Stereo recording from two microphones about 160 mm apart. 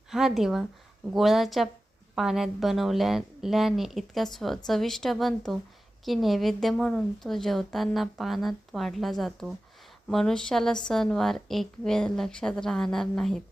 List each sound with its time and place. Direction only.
0.1 s a woman's voice: centre (ahead or behind)